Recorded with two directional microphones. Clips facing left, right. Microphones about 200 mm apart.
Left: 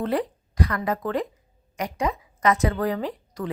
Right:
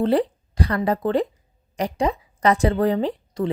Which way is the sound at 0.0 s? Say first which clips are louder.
Right 6 dB; 30° right (ahead or behind).